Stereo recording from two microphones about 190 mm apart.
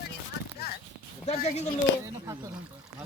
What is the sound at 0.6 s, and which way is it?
Speech, 55° left (ahead or behind).